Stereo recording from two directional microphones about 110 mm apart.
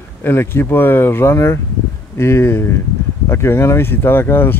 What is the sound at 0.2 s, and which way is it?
Speech, 20° left (ahead or behind).